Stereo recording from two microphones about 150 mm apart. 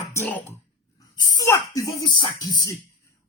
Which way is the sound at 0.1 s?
15° left (ahead or behind).